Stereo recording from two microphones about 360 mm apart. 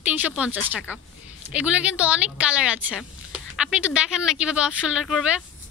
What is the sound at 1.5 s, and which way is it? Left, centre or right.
Speech, centre.